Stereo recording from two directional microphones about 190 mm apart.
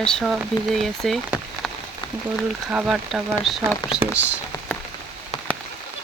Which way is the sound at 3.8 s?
25° left (ahead or behind).